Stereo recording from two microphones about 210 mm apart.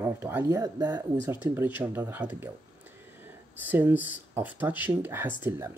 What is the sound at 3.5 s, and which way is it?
Speech, 10° right (ahead or behind).